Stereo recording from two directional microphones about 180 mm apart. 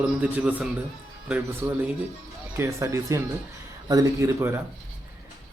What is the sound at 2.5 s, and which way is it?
A man's voice, 15° right (ahead or behind).